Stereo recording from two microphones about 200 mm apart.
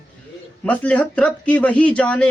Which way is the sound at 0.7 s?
10° left (ahead or behind).